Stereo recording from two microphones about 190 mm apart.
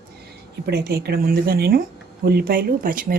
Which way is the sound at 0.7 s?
60° right (ahead or behind).